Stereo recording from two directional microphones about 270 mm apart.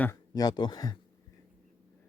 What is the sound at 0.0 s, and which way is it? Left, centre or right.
Speech, centre.